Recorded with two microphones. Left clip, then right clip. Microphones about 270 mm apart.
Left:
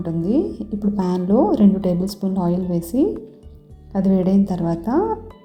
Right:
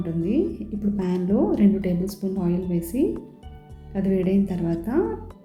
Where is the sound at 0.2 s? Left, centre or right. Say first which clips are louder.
Left 3 dB; left.